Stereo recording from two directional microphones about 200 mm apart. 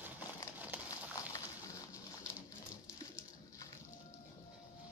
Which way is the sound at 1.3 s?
15° left (ahead or behind).